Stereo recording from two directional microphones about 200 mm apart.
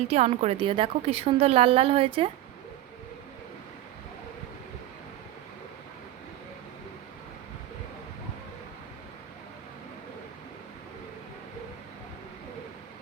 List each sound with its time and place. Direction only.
0.1 s a woman's voice: 30° right (ahead or behind)